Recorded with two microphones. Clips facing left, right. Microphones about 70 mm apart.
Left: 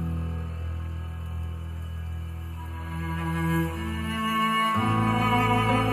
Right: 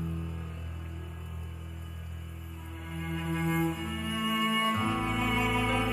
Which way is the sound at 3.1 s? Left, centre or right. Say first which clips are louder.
Left 3 dB; left.